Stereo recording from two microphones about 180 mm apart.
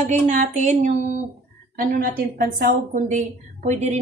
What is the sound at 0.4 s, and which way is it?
Speech, 40° right (ahead or behind).